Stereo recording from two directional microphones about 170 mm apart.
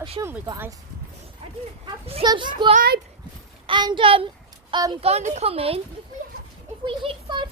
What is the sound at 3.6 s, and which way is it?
A child's voice, 25° right (ahead or behind).